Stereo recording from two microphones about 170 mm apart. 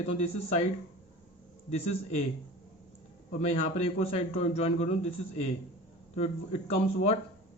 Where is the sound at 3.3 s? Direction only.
40° left (ahead or behind).